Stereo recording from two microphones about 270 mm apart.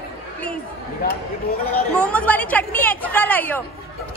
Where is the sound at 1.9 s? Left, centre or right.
Centre.